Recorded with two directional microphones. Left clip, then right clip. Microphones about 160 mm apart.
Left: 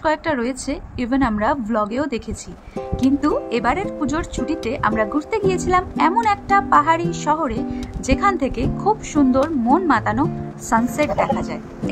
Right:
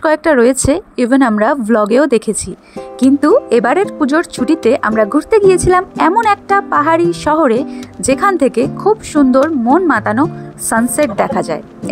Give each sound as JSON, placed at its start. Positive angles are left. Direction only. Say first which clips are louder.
{"t": 0.0, "sound": "speech", "louder": "right 10 dB", "side_deg": -45}